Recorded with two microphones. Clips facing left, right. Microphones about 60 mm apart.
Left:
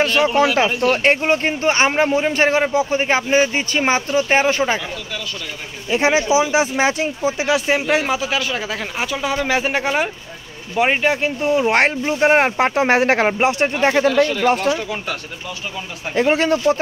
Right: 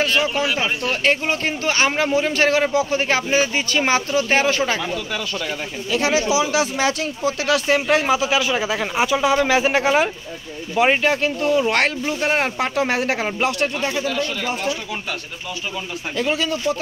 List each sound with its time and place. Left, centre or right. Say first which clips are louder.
0.0 s speech: left 4 dB; left; by 4.8 s centre
5.9 s speech: left 3 dB; left; by 11.3 s centre
11.4 s speech: left 3 dB; left
13.3 s speech: left 4 dB; left
13.7 s speech: left 8 dB; left
16.2 s speech: left 6 dB; left